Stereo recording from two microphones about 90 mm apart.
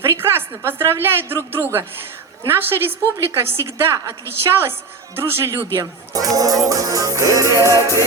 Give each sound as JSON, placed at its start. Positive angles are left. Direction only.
{"t": 0.0, "sound": "a woman's voice", "side_deg": -25}
{"t": 2.4, "sound": "a woman's voice", "side_deg": -25}
{"t": 7.4, "sound": "music", "side_deg": 35}